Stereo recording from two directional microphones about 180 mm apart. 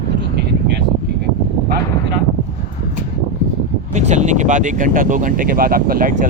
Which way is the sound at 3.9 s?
40° right (ahead or behind).